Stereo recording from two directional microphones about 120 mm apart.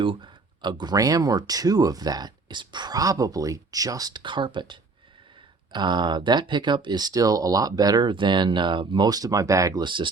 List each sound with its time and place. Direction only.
0.0 s speech: 45° right (ahead or behind); by 9.8 s 25° right (ahead or behind)
9.8 s speech: 40° right (ahead or behind)